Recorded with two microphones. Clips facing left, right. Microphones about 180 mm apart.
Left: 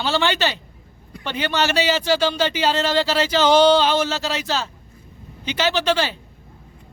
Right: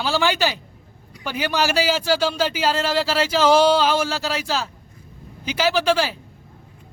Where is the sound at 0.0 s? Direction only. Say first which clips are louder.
Even; 5° right (ahead or behind).